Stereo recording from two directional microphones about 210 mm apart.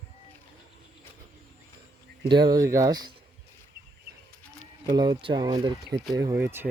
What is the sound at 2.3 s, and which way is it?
Speech, 20° right (ahead or behind).